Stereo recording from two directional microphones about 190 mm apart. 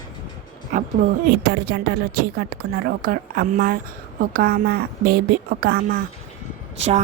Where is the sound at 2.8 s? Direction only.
50° right (ahead or behind).